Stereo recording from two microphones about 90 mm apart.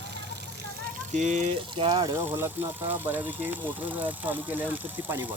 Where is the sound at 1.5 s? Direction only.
75° right (ahead or behind).